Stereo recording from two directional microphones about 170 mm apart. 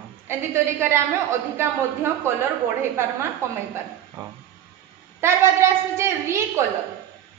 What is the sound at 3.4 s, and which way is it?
Speech, 15° right (ahead or behind).